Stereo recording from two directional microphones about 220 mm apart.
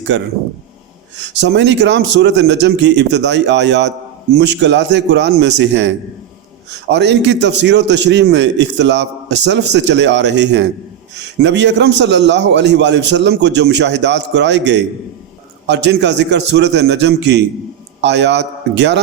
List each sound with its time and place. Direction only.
0.1 s a man's voice: 55° right (ahead or behind)
6.9 s a man's voice: 50° right (ahead or behind)